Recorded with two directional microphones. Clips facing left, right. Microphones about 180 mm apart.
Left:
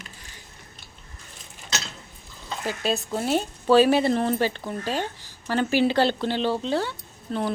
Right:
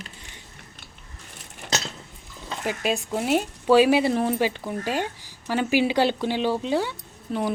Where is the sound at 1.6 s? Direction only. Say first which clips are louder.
Right 5 dB; 70° right (ahead or behind).